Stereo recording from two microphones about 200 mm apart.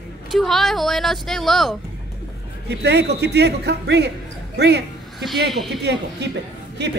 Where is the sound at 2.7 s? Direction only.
55° right (ahead or behind).